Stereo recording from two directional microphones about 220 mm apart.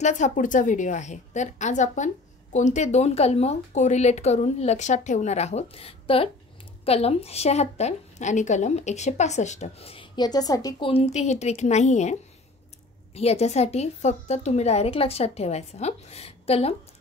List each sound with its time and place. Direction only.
0.0 s a woman's voice: 35° left (ahead or behind)